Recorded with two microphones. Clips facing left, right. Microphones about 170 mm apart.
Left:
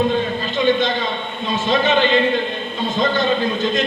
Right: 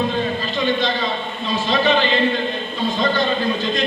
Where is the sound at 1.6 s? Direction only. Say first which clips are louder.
Even; 50° left (ahead or behind).